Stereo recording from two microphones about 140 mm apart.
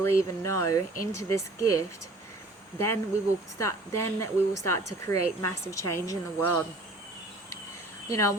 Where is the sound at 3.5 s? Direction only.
20° left (ahead or behind).